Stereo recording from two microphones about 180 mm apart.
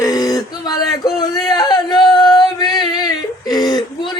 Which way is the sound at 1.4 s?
20° left (ahead or behind).